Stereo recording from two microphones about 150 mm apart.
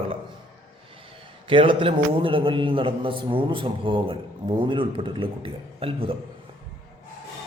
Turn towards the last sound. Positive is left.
turn(degrees=-35)  # may be behind; listen again after turning